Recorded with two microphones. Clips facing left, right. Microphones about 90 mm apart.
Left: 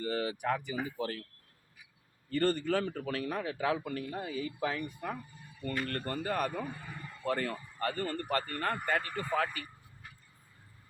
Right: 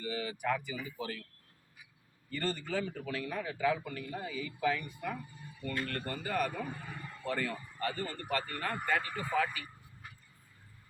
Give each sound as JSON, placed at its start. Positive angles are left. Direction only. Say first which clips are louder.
{"t": 0.0, "sound": "speech", "louder": "left 3 dB", "side_deg": 60}
{"t": 0.8, "sound": "speech", "louder": "left 5 dB", "side_deg": 80}
{"t": 2.4, "sound": "a man's voice", "louder": "left 5 dB", "side_deg": 60}
{"t": 6.7, "sound": "a sound", "louder": "even", "side_deg": 0}
{"t": 7.3, "sound": "speech", "louder": "left 2 dB", "side_deg": 45}
{"t": 8.8, "sound": "speech", "louder": "left 1 dB", "side_deg": -5}
{"t": 9.4, "sound": "speech", "louder": "right 2 dB", "side_deg": 45}